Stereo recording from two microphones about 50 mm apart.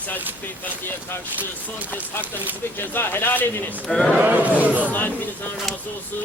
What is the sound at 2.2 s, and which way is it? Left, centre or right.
Speech, right.